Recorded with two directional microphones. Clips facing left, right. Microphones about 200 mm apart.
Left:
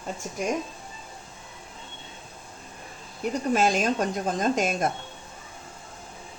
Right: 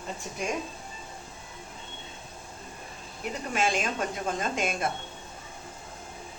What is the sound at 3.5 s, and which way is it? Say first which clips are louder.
Speech: left 5 dB; 40° left (ahead or behind).